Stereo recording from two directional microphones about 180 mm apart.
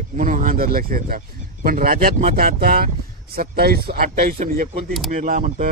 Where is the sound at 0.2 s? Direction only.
45° right (ahead or behind).